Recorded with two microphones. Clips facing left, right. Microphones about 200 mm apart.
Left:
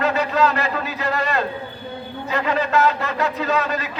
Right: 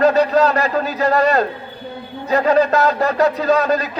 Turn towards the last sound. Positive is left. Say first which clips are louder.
# right 6 dB
turn(degrees=-40)  # may be behind; listen again after turning